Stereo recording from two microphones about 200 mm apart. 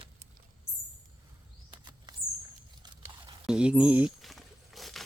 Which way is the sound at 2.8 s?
25° right (ahead or behind).